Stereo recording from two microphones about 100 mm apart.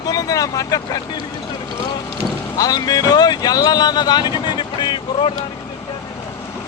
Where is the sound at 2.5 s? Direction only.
40° left (ahead or behind).